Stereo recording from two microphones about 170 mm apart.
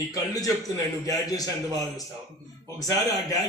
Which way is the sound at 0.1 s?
20° left (ahead or behind).